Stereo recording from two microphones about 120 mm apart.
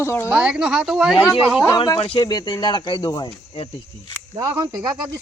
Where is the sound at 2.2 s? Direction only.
35° left (ahead or behind).